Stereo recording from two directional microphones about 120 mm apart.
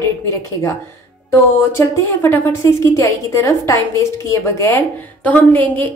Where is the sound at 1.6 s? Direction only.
20° left (ahead or behind).